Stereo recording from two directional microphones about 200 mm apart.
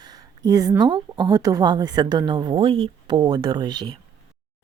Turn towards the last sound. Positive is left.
turn(degrees=-20)  # may be behind; listen again after turning